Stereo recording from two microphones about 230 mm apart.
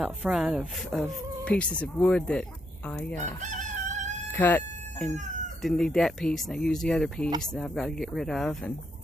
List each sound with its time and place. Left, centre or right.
0.0 s speech: centre
3.4 s chicken: right
4.3 s chicken: centre
5.6 s speech: centre